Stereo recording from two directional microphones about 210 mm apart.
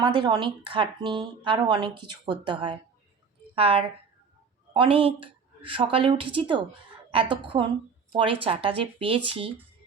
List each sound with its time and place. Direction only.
0.0 s a woman's voice: 20° right (ahead or behind)